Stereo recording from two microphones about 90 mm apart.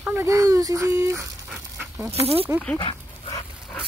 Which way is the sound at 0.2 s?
35° right (ahead or behind).